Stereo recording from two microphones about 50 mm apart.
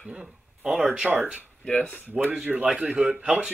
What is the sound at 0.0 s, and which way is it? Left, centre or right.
Speech, centre.